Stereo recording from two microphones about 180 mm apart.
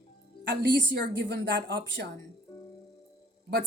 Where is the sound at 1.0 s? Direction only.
65° right (ahead or behind).